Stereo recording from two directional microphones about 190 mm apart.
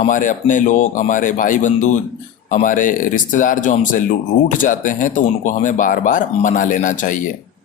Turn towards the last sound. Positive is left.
turn(degrees=45)  # may be behind; listen again after turning